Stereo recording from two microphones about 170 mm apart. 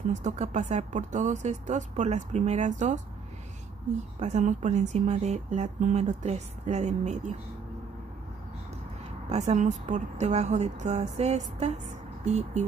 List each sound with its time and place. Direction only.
0.1 s speech: 45° right (ahead or behind)
4.2 s speech: 45° right (ahead or behind)
9.3 s a woman's voice: 40° right (ahead or behind)